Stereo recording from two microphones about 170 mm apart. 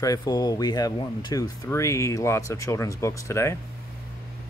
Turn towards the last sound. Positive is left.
turn(degrees=15)  # may be behind; listen again after turning